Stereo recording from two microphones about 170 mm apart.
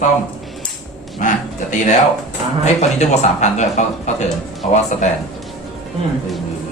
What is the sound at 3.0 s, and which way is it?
A man's voice, 40° left (ahead or behind).